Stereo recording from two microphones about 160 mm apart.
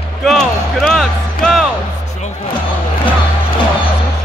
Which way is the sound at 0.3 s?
Centre (ahead or behind).